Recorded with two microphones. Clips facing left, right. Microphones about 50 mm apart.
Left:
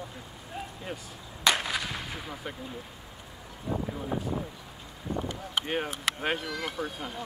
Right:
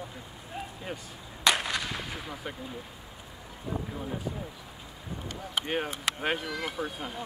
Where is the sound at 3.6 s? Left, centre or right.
Centre.